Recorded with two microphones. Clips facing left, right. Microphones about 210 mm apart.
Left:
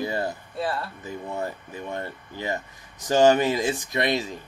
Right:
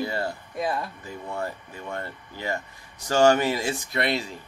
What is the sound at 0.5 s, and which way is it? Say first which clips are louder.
Speech: right 2 dB; 15° right (ahead or behind).